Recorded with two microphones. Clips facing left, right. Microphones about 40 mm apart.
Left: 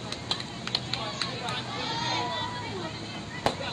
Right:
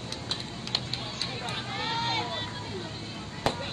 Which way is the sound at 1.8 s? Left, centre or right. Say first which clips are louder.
Right 2 dB; right.